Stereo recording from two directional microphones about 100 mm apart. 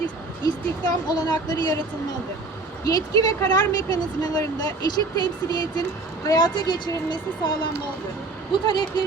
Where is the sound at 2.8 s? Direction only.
40° left (ahead or behind).